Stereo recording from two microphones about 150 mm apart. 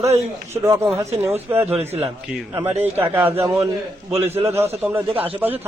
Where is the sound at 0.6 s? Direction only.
20° right (ahead or behind).